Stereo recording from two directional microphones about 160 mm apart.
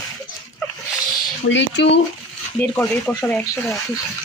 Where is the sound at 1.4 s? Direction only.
65° left (ahead or behind).